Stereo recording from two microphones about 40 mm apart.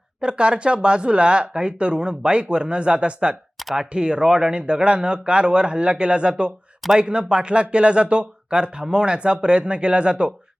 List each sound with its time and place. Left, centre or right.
0.2 s speech: right